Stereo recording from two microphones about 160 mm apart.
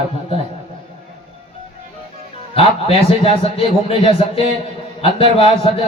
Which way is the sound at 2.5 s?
35° left (ahead or behind).